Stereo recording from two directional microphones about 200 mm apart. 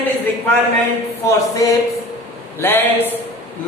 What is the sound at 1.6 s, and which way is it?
A man's voice, 15° left (ahead or behind).